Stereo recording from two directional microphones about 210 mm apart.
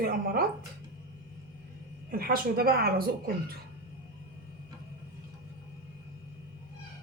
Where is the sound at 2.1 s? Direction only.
45° right (ahead or behind).